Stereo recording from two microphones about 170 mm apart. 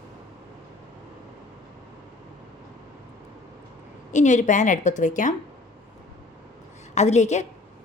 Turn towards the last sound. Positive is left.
turn(degrees=40)  # may be behind; listen again after turning